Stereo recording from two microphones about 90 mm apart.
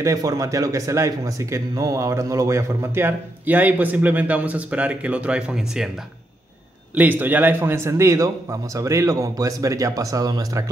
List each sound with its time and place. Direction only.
0.0 s speech: 40° right (ahead or behind); by 5.9 s 5° right (ahead or behind)
7.0 s a man's voice: 20° right (ahead or behind); by 10.6 s 45° right (ahead or behind)